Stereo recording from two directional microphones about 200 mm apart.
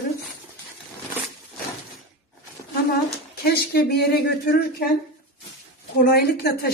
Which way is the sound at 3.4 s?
55° left (ahead or behind).